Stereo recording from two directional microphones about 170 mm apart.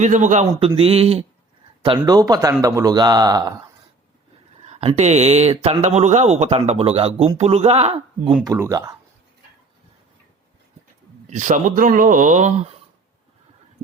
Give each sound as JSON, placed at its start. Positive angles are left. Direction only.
{"t": 0.0, "sound": "speech", "side_deg": -45}
{"t": 0.8, "sound": "speech", "side_deg": -35}
{"t": 4.6, "sound": "speech", "side_deg": -35}
{"t": 8.4, "sound": "speech", "side_deg": -15}
{"t": 11.3, "sound": "speech", "side_deg": -45}